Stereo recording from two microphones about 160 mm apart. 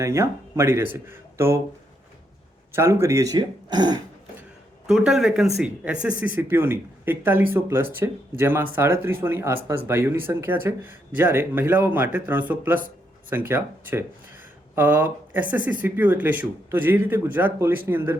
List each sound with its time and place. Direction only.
0.0 s speech: 15° right (ahead or behind)
2.7 s speech: 15° right (ahead or behind)
4.9 s speech: 5° right (ahead or behind)